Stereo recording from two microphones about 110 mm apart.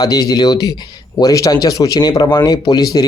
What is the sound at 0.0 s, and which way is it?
Speech, 35° left (ahead or behind).